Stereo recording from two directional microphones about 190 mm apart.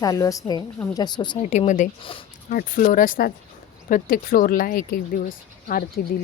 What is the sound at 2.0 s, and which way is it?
Speech, 30° left (ahead or behind).